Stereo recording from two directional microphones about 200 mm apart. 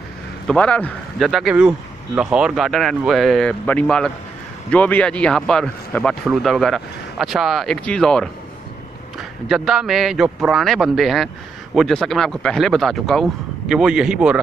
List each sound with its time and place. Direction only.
0.5 s speech: 5° left (ahead or behind)
9.5 s speech: centre (ahead or behind)